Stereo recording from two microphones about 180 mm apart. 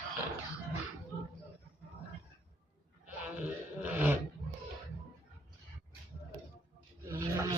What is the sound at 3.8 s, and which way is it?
Roar, 10° right (ahead or behind).